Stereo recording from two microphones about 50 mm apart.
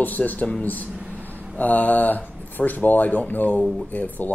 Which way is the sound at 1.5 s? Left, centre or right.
Left.